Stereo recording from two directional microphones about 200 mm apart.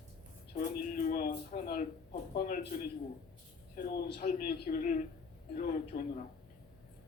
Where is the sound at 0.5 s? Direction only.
45° left (ahead or behind).